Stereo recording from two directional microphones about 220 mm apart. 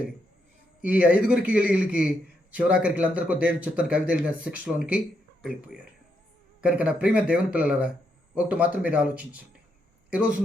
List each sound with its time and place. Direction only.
0.9 s a man's voice: 5° right (ahead or behind)